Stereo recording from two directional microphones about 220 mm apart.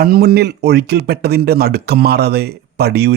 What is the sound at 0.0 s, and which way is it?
Speech, 45° right (ahead or behind).